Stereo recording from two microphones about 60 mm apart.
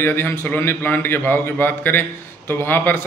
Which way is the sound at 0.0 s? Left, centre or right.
Left.